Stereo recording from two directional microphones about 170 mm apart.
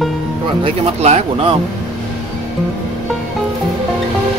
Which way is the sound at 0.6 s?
40° right (ahead or behind).